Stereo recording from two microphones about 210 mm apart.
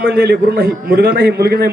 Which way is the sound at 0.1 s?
50° right (ahead or behind).